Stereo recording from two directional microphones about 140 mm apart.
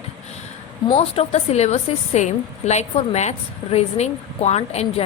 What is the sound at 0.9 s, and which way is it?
A woman's voice, 45° left (ahead or behind).